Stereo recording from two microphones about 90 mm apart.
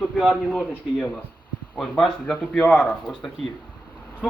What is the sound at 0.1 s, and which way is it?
Speech, 5° right (ahead or behind).